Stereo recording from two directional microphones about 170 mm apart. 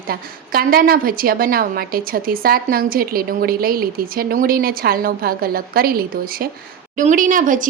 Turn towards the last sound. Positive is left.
turn(degrees=-50)  # may be behind; listen again after turning